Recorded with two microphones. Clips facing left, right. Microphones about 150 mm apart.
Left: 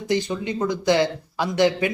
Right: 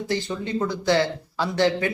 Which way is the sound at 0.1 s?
15° left (ahead or behind).